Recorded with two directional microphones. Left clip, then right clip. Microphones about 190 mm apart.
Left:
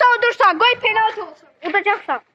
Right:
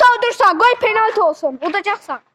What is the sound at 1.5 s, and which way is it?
Speech, 15° right (ahead or behind).